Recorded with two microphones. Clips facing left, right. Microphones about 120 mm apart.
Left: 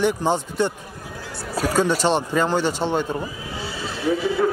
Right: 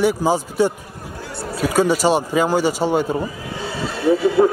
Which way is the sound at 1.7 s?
10° right (ahead or behind).